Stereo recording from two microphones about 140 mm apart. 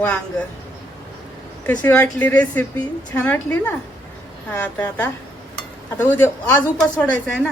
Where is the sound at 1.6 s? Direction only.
10° left (ahead or behind).